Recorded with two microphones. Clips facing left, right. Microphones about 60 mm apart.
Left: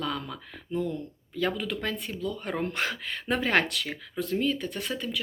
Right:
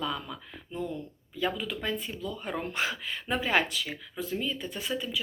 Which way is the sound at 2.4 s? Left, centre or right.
Left.